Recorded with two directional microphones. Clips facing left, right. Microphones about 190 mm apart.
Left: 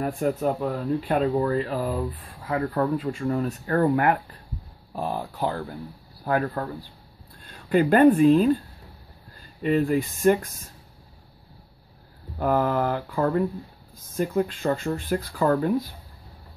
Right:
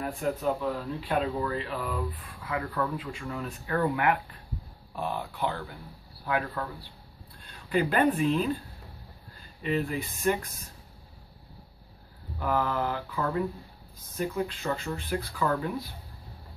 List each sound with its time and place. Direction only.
0.0 s speech: 45° left (ahead or behind)
9.6 s speech: 45° left (ahead or behind)
12.4 s speech: 45° left (ahead or behind)